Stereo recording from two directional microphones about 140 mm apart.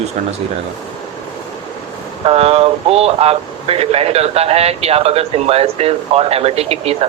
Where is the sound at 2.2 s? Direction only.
45° right (ahead or behind).